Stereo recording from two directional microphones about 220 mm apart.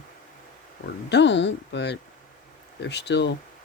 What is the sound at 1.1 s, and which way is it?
Speech, 50° left (ahead or behind).